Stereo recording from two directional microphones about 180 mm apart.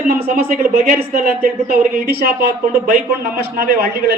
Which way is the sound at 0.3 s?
55° right (ahead or behind).